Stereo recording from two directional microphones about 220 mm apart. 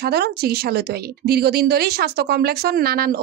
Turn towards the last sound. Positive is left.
turn(degrees=-45)  # may be behind; listen again after turning